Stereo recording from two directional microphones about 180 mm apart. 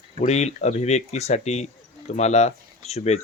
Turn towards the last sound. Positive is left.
turn(degrees=35)  # may be behind; listen again after turning